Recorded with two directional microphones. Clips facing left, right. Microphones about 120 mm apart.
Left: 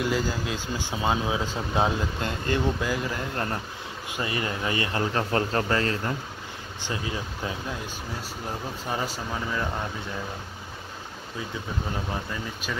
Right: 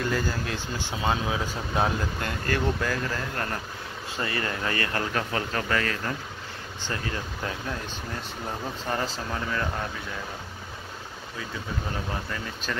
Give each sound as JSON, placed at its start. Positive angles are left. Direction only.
{"t": 0.0, "sound": "speech", "side_deg": 15}
{"t": 6.9, "sound": "speech", "side_deg": 15}